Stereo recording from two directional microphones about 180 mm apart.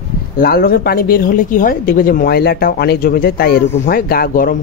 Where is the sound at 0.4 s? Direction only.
55° left (ahead or behind).